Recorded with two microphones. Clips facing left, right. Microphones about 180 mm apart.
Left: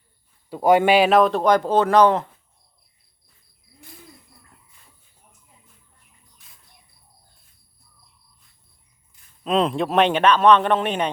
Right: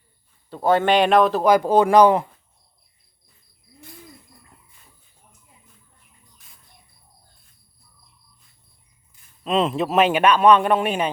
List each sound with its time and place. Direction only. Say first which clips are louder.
0.5 s a man's voice: left 2 dB; 10° left (ahead or behind); by 2.3 s 10° right (ahead or behind)
9.4 s speech: even; centre (ahead or behind)